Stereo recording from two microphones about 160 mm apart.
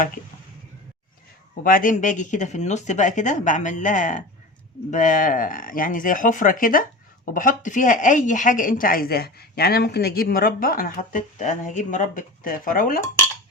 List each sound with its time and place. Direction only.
1.6 s speech: 60° left (ahead or behind)